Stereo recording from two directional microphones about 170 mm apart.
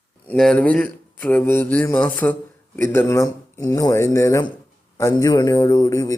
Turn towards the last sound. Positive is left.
turn(degrees=20)  # may be behind; listen again after turning